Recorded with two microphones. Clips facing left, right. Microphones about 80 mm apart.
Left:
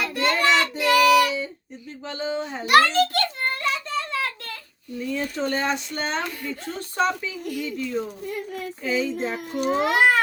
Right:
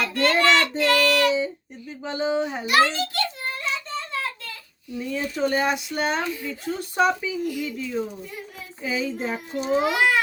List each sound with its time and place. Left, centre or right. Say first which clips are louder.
0.0 s child singing: right 2 dB; centre
0.8 s music: left 3 dB; centre
2.0 s speech: right 4 dB; centre
2.9 s a sound: left 5 dB; left
4.9 s speech: right 1 dB; centre
9.5 s a child's voice: even; left